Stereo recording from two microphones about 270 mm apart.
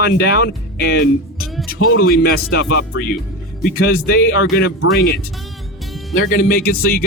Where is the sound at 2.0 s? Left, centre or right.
Left.